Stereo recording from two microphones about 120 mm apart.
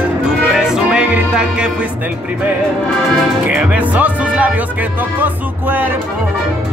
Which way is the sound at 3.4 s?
10° right (ahead or behind).